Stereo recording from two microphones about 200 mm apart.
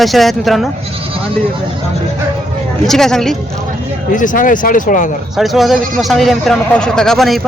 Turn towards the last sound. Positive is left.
turn(degrees=0)  # may be behind; listen again after turning